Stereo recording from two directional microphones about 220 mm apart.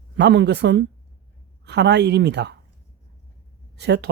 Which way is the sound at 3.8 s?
50° right (ahead or behind).